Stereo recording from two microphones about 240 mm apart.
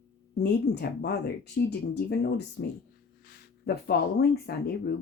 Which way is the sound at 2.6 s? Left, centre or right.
Left.